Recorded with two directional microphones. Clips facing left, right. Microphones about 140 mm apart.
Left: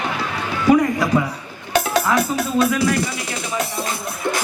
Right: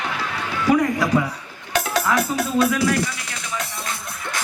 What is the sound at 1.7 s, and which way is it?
Music, 25° left (ahead or behind).